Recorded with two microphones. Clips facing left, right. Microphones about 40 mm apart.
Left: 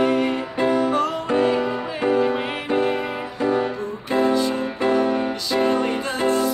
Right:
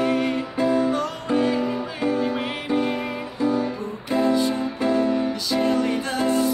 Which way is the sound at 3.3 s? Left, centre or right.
Left.